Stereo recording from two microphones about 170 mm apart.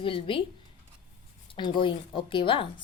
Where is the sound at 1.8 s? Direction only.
30° left (ahead or behind).